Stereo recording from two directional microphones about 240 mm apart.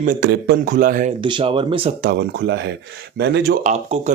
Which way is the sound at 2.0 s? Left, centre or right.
Right.